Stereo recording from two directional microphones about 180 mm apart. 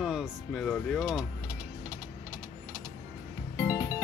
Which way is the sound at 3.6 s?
15° left (ahead or behind).